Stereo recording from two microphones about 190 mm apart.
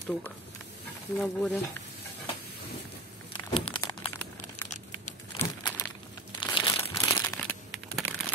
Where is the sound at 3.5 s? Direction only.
25° left (ahead or behind).